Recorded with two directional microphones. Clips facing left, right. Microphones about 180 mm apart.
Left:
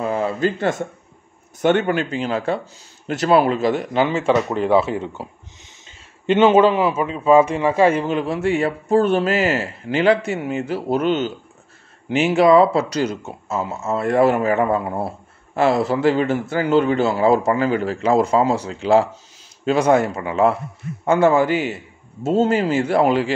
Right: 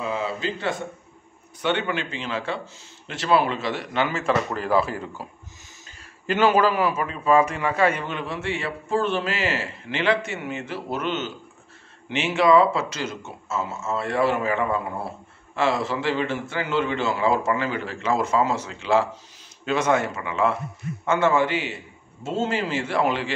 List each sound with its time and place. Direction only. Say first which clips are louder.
0.0 s a sound: left 7 dB; 50° left (ahead or behind)
1.6 s speech: left 8 dB; 45° left (ahead or behind)
4.0 s a man's voice: left 5 dB; 30° left (ahead or behind)